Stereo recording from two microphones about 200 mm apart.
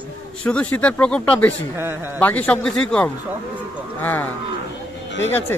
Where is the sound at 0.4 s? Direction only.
5° left (ahead or behind).